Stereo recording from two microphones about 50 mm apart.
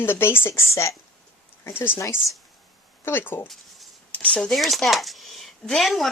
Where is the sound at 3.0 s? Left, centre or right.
Left.